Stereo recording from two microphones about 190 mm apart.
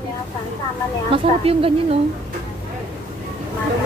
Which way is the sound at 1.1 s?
30° right (ahead or behind).